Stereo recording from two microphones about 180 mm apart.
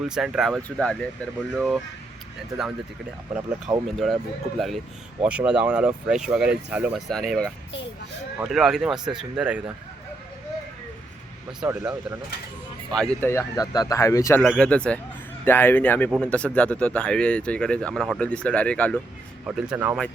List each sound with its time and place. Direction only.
0.0 s speech: 5° right (ahead or behind)
3.8 s speech: centre (ahead or behind)
11.6 s speech: 5° right (ahead or behind)
12.9 s speech: 5° left (ahead or behind)
14.4 s speech: 5° left (ahead or behind)
19.5 s speech: 5° right (ahead or behind)